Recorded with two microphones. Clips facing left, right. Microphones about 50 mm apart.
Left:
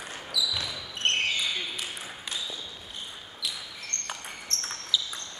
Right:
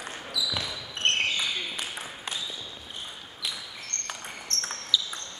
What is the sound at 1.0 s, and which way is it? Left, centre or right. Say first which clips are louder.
Basketball bounce: right 1 dB; right.